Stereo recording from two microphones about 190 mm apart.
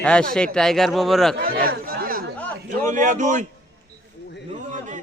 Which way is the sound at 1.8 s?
50° right (ahead or behind).